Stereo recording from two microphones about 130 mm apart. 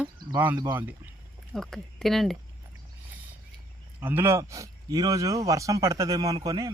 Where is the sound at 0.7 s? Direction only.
15° right (ahead or behind).